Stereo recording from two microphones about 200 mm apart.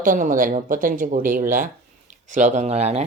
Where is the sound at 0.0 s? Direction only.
40° right (ahead or behind).